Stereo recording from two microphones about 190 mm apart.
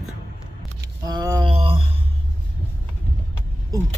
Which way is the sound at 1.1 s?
20° right (ahead or behind).